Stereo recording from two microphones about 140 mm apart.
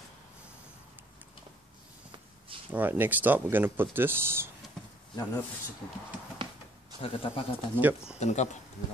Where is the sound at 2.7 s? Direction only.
10° right (ahead or behind).